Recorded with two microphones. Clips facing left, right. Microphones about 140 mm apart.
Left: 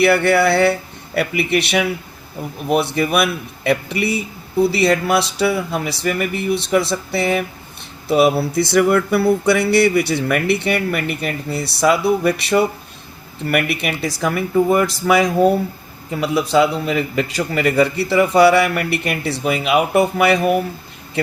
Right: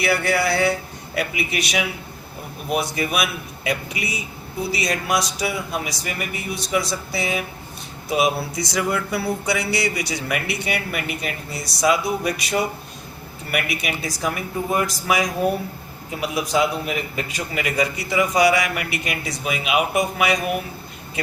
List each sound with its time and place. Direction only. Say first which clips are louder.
0.0 s speech: left 7 dB; 60° left (ahead or behind)
2.9 s speech: left 6 dB; 55° left (ahead or behind)